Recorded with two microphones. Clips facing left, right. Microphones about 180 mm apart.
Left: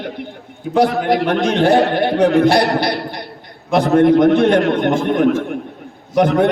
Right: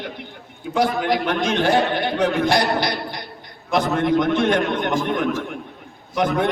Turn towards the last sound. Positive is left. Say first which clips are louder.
# left 7 dB
turn(degrees=60)  # may be behind; listen again after turning